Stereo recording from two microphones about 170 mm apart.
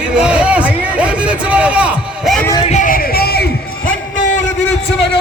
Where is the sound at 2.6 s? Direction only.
45° left (ahead or behind); by 3.9 s 65° left (ahead or behind).